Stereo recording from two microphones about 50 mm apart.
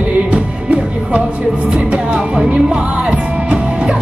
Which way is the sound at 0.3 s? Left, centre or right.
Right.